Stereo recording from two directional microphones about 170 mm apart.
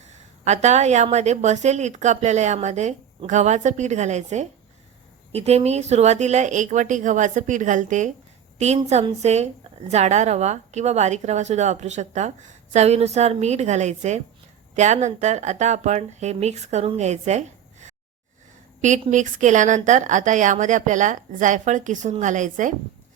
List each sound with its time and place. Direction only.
0.4 s a woman's voice: 40° right (ahead or behind)
19.1 s a woman's voice: 45° right (ahead or behind)